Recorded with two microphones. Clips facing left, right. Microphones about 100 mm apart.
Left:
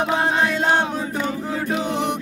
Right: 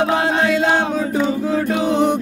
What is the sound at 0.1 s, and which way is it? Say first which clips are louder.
Music: right 3 dB; 90° right.